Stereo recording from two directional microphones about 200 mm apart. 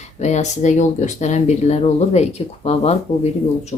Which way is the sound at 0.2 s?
35° left (ahead or behind).